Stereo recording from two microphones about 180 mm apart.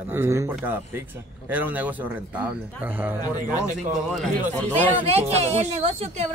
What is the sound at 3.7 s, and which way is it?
Speech, 45° right (ahead or behind).